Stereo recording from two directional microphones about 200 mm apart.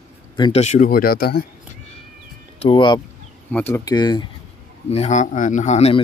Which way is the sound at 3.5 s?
10° left (ahead or behind).